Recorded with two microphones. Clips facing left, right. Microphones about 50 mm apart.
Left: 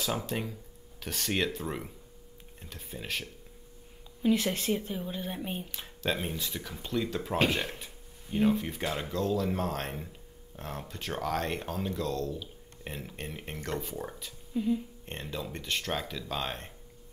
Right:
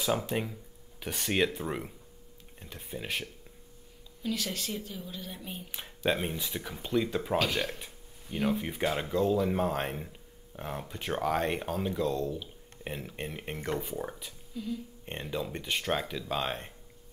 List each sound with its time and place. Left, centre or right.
0.0 s speech: centre
4.2 s a woman's voice: left
5.7 s speech: centre
7.8 s a sound: centre
8.6 s speech: centre
14.5 s speech: left
15.0 s speech: centre